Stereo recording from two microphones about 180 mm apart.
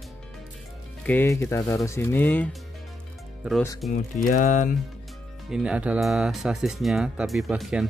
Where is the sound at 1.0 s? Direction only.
10° left (ahead or behind).